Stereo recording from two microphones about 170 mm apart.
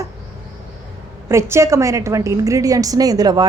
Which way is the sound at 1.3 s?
15° right (ahead or behind).